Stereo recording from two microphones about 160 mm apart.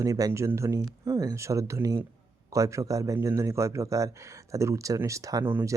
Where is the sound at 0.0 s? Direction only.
20° right (ahead or behind).